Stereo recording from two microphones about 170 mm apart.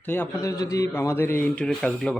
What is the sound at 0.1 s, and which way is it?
A man's voice, 15° left (ahead or behind).